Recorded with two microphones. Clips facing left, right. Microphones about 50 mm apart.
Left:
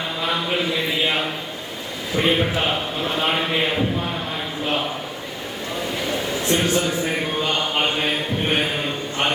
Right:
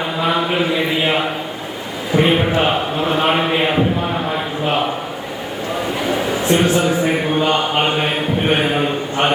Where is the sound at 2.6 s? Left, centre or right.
Right.